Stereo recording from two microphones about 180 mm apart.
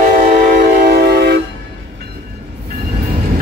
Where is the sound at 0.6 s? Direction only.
60° right (ahead or behind).